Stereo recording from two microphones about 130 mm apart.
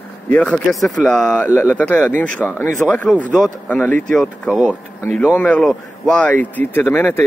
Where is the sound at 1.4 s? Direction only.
20° left (ahead or behind).